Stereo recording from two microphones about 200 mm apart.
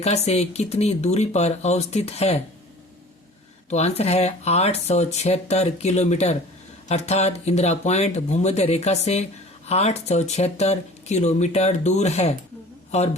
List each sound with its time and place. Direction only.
0.0 s speech: 30° left (ahead or behind)
3.7 s speech: 35° left (ahead or behind)